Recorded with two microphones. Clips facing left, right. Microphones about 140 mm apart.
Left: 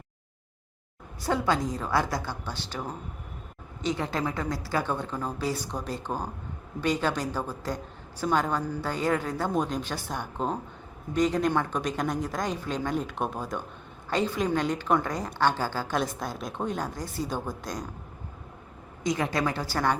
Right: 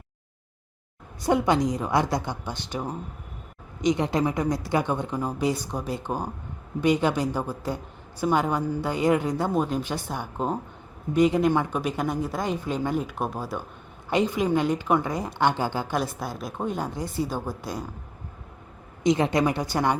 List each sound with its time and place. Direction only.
1.2 s a woman's voice: 20° right (ahead or behind)
16.0 s a woman's voice: 5° right (ahead or behind)
19.0 s a woman's voice: 25° right (ahead or behind)